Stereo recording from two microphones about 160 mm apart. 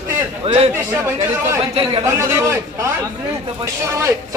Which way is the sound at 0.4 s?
40° right (ahead or behind).